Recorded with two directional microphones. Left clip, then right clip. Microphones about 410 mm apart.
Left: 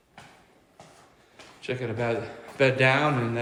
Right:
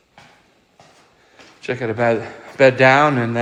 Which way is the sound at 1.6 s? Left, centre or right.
Centre.